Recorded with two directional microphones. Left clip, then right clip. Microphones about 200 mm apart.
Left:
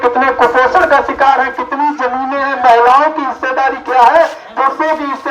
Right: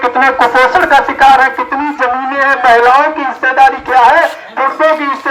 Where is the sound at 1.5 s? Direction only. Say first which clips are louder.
Even; 45° left (ahead or behind).